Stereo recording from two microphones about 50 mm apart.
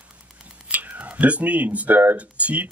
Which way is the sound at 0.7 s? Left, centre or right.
Right.